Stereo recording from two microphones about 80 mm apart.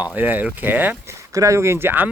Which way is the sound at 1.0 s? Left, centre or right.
Right.